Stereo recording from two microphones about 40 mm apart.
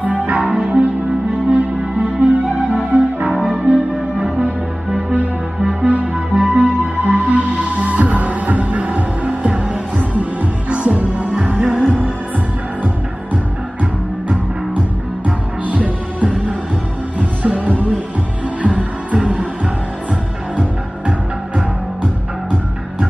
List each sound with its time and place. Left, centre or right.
0.0 s music: right
3.4 s music: right
5.7 s music: right
11.3 s music: right
15.6 s music: right
18.7 s music: right